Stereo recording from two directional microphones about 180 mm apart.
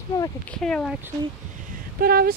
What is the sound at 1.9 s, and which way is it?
Speech, 55° right (ahead or behind).